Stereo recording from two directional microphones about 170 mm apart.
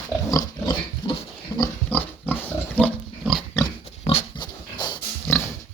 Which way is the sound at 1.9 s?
10° left (ahead or behind).